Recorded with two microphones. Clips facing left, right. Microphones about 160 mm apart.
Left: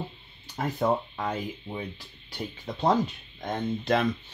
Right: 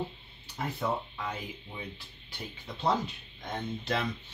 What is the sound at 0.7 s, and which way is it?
Speech, 45° left (ahead or behind).